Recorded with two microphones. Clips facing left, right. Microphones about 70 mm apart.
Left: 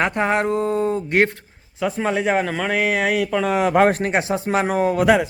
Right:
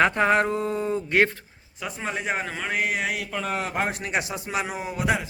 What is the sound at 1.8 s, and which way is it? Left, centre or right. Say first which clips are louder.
Speech: left 10 dB; left.